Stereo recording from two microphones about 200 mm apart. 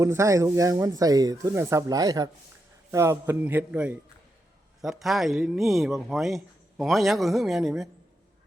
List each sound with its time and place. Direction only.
0.0 s speech: 15° right (ahead or behind)